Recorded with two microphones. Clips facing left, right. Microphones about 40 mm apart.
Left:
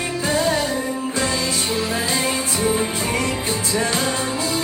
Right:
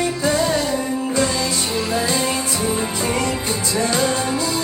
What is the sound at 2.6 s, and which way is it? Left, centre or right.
Music, left.